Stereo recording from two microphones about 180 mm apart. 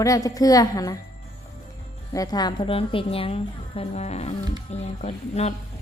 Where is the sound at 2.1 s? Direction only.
20° left (ahead or behind).